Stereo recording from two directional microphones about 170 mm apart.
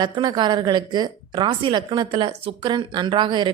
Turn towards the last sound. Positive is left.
turn(degrees=-30)  # may be behind; listen again after turning